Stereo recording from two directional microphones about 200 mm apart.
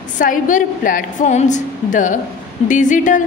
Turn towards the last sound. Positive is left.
turn(degrees=40)  # may be behind; listen again after turning